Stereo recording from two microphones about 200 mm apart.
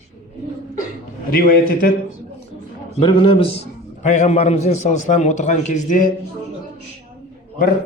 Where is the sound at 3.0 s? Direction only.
25° left (ahead or behind); by 6.1 s 40° left (ahead or behind).